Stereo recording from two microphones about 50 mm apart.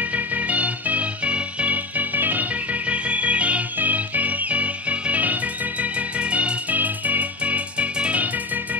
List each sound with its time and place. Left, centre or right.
0.1 s music: right